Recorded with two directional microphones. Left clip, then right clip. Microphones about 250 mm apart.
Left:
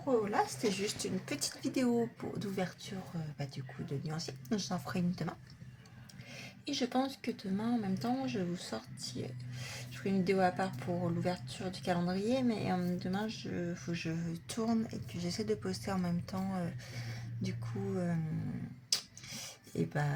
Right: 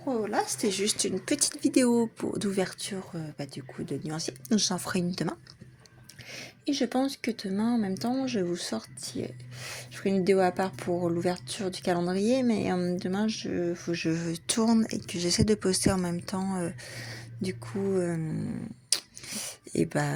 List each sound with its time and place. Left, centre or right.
0.3 s speech: right
6.3 s speech: right
18.9 s a sound: right